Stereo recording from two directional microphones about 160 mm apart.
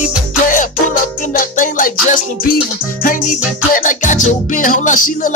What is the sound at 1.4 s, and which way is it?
Music, 60° left (ahead or behind).